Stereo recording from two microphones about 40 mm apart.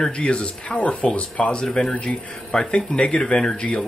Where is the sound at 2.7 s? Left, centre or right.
Left.